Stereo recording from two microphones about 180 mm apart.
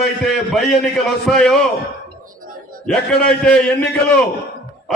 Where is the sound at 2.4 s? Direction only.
50° right (ahead or behind).